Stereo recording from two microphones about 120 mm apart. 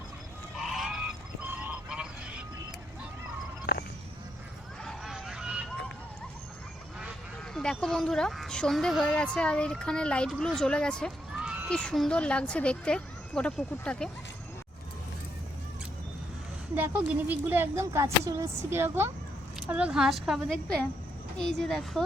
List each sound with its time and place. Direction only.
0.6 s goose: centre (ahead or behind)
4.8 s vehicle: centre (ahead or behind)
7.5 s speech: 5° left (ahead or behind)
11.3 s a sound: 10° right (ahead or behind)
11.7 s speech: 5° left (ahead or behind)
16.7 s speech: 15° right (ahead or behind)
19.5 s speech: 10° right (ahead or behind)